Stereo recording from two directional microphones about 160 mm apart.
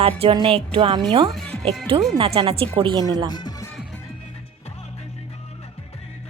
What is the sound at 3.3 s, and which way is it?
Music, 25° left (ahead or behind).